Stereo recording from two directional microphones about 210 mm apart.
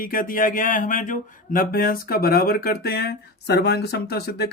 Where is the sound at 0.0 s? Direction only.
40° left (ahead or behind).